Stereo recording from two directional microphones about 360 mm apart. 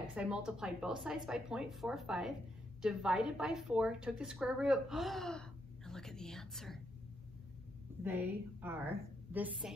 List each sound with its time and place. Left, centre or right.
0.1 s a woman's voice: centre
8.0 s a woman's voice: centre